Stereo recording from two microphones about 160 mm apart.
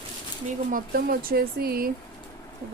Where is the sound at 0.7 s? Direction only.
65° right (ahead or behind).